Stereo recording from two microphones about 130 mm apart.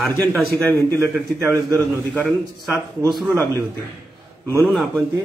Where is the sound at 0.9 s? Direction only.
20° right (ahead or behind).